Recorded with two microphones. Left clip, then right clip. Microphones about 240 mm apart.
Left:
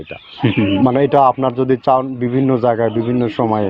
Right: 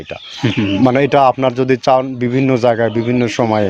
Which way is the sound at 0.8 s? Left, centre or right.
Right.